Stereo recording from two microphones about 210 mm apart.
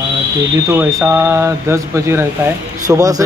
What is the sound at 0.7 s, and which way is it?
A man's voice, 15° right (ahead or behind).